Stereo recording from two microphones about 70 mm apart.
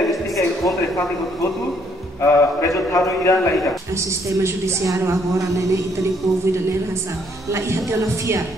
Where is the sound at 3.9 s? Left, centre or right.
Right.